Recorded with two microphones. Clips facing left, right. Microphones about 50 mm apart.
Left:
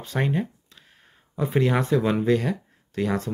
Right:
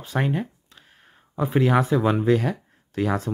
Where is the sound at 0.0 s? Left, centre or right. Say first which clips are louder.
Even; centre.